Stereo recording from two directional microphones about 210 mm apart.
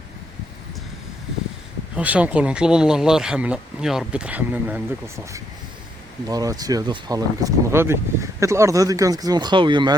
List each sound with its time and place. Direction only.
2.0 s speech: 5° right (ahead or behind); by 9.9 s 20° right (ahead or behind)